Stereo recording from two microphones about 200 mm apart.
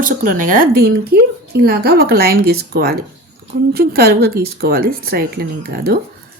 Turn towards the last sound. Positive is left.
turn(degrees=-50)  # may be behind; listen again after turning